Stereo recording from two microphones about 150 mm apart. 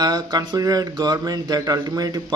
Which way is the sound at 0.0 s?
25° right (ahead or behind).